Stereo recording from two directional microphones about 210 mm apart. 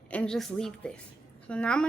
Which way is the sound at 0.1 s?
5° left (ahead or behind).